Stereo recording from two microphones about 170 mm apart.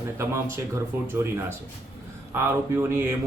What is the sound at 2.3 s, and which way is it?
Speech, 15° right (ahead or behind).